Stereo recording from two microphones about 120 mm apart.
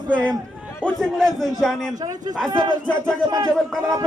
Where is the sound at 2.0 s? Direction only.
30° right (ahead or behind).